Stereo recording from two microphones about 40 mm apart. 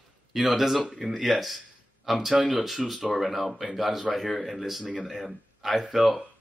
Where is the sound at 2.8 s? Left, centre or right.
Centre.